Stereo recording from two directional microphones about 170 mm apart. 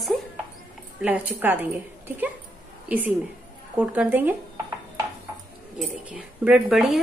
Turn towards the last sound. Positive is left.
turn(degrees=-5)  # may be behind; listen again after turning